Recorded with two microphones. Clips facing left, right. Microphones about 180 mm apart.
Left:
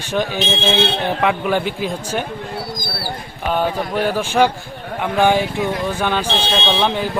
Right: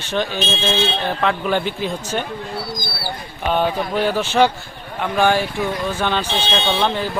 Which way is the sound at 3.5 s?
5° left (ahead or behind).